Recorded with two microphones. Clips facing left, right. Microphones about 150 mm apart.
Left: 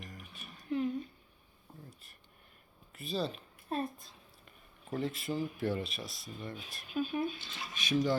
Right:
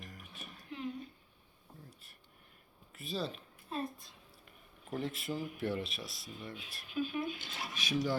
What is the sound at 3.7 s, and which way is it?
Speech, 50° left (ahead or behind).